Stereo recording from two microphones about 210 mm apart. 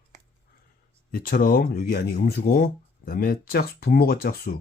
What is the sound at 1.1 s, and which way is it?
Speech, 40° left (ahead or behind).